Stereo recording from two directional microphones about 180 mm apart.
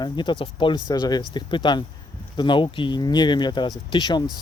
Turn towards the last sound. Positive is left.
turn(degrees=25)  # may be behind; listen again after turning